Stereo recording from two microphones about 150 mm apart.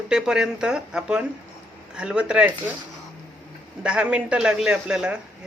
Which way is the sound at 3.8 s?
5° right (ahead or behind).